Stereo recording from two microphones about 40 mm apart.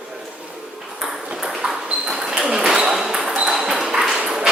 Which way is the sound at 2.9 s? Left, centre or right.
Centre.